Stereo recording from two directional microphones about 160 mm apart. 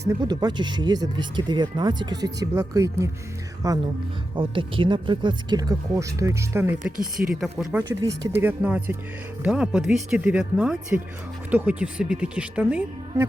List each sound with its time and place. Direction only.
0.0 s speech: 20° right (ahead or behind)
4.4 s speech: 30° right (ahead or behind); by 13.2 s 5° right (ahead or behind)